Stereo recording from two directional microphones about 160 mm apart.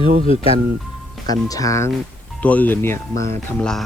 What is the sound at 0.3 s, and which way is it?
Speech, 35° left (ahead or behind).